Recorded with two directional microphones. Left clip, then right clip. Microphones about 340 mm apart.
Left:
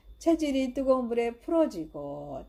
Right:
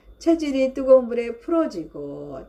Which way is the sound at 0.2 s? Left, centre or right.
Left.